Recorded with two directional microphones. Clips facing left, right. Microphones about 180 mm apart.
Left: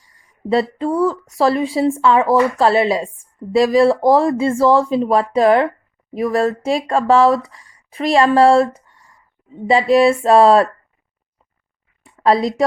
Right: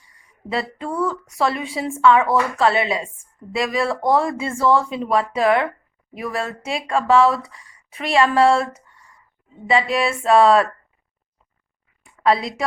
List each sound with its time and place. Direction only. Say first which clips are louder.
0.8 s speech: left 6 dB; 30° left (ahead or behind)
8.9 s a sound: left 1 dB; centre (ahead or behind)
9.6 s speech: left 7 dB; 35° left (ahead or behind)
12.0 s a woman's voice: left 4 dB; 35° left (ahead or behind)